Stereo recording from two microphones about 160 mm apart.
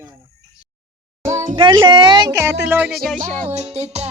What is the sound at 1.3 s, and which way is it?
Music, 50° right (ahead or behind).